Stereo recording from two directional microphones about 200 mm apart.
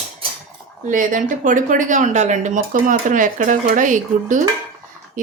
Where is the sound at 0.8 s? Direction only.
40° right (ahead or behind).